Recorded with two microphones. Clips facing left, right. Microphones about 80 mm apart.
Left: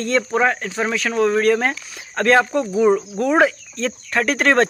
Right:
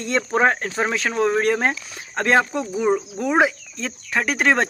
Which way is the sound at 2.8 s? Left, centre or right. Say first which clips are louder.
Left 4 dB; centre.